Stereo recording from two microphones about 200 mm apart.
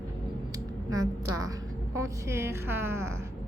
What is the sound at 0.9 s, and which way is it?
A woman's voice, 20° right (ahead or behind).